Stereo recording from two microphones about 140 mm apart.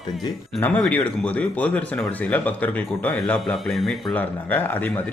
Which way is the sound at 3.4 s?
Centre (ahead or behind).